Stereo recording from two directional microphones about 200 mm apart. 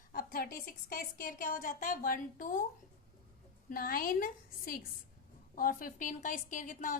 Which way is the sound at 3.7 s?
45° left (ahead or behind).